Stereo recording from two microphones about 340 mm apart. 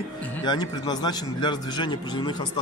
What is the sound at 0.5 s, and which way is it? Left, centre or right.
A man's voice, centre.